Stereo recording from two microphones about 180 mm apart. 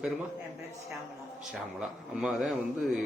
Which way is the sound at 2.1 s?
Centre (ahead or behind).